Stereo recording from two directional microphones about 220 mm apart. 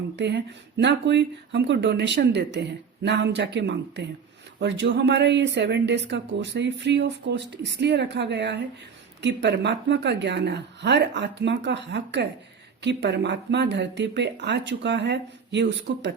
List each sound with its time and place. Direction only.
0.2 s speech: 50° right (ahead or behind)